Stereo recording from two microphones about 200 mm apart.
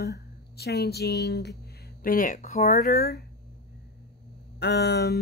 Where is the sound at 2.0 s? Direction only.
45° left (ahead or behind).